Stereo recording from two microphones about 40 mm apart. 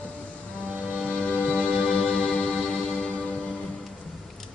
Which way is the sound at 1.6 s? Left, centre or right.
Left.